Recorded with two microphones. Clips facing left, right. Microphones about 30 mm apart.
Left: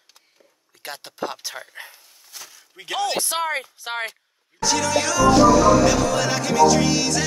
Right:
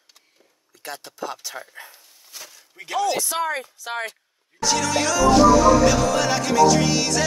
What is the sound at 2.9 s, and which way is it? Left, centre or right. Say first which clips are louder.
Speech: right 1 dB; left.